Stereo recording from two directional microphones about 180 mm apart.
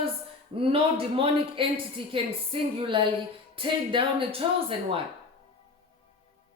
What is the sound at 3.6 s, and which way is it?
Speech, 30° right (ahead or behind).